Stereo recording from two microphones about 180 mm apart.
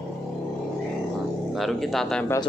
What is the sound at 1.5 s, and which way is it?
Speech, centre (ahead or behind).